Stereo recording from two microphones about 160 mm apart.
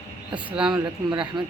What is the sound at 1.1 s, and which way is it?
Speech, 30° right (ahead or behind).